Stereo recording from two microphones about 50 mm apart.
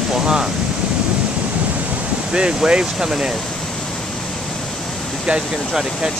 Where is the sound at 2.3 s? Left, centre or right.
Centre.